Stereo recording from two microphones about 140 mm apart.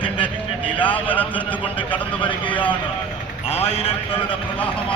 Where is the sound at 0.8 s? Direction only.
10° left (ahead or behind).